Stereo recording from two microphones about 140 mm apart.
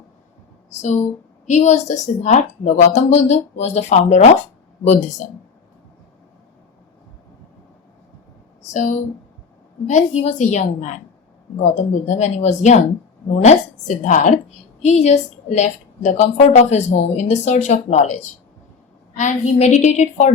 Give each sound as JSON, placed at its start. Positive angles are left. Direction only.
{"t": 0.7, "sound": "a woman's voice", "side_deg": 55}
{"t": 8.7, "sound": "a woman's voice", "side_deg": 60}